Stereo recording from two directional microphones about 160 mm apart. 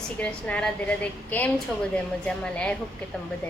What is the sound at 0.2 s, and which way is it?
A woman's voice, 10° left (ahead or behind).